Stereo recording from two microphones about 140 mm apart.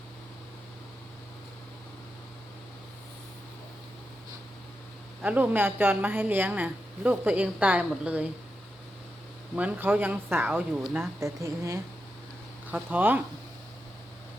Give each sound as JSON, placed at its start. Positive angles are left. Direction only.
{"t": 5.2, "sound": "a woman's voice", "side_deg": -10}
{"t": 9.6, "sound": "a woman's voice", "side_deg": -10}
{"t": 11.0, "sound": "a woman's voice", "side_deg": -20}
{"t": 12.7, "sound": "a woman's voice", "side_deg": -10}